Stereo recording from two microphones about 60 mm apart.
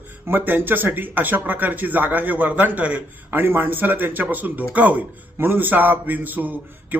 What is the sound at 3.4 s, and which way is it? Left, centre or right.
Speech, right.